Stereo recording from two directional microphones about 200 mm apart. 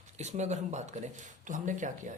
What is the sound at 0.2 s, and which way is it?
Speech, 35° right (ahead or behind).